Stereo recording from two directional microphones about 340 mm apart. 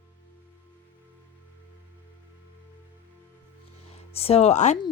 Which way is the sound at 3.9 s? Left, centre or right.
Centre.